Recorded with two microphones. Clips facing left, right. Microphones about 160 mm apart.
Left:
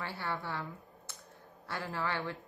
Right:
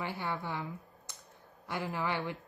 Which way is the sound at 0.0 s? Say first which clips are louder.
Right 2 dB; 15° right (ahead or behind).